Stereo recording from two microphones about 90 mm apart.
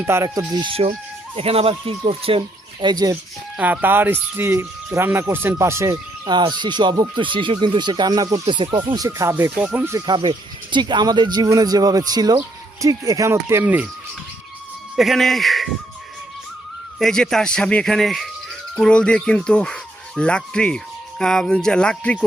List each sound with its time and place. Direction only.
0.0 s speech: 30° right (ahead or behind)
0.5 s speech: 75° right (ahead or behind)
2.8 s speech: 45° right (ahead or behind)
3.6 s speech: 20° right (ahead or behind)
6.2 s speech: 50° right (ahead or behind)
8.4 s speech: 70° right (ahead or behind)
9.0 s speech: 35° right (ahead or behind)
10.1 s speech: 60° right (ahead or behind); by 13.7 s 30° right (ahead or behind)
14.9 s speech: centre (ahead or behind)
17.0 s speech: 5° left (ahead or behind)